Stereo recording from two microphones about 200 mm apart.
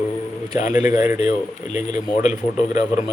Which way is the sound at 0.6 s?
35° left (ahead or behind).